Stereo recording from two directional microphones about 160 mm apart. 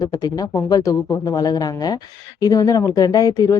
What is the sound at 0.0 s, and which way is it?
Speech, 20° left (ahead or behind).